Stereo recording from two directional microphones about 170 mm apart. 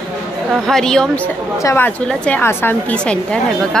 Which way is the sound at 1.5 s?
15° left (ahead or behind).